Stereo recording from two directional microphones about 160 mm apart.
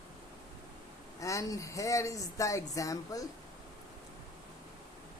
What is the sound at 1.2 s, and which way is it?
A woman's voice, 20° left (ahead or behind).